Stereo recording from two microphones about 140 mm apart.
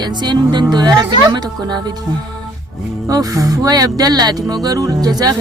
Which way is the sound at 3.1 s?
25° right (ahead or behind).